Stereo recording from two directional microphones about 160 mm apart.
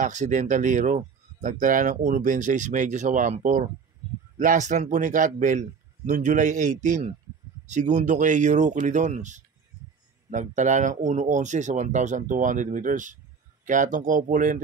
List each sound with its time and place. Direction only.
0.0 s speech: 50° right (ahead or behind)